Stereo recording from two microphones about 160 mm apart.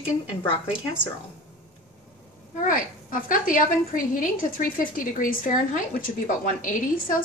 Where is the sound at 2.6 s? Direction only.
60° left (ahead or behind).